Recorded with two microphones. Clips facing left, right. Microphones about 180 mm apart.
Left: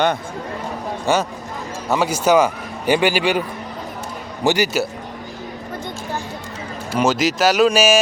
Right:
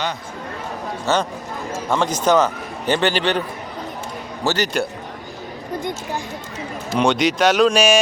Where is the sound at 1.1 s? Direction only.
15° left (ahead or behind).